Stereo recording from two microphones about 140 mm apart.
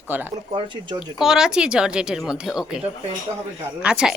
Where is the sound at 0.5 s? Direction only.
35° right (ahead or behind).